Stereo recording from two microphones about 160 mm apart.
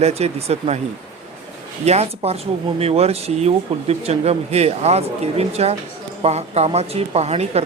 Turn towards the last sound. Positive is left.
turn(degrees=-40)  # may be behind; listen again after turning